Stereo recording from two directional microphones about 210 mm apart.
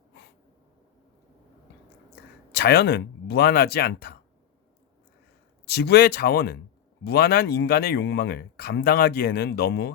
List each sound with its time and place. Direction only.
2.5 s speech: 50° left (ahead or behind)
5.6 s speech: 50° left (ahead or behind)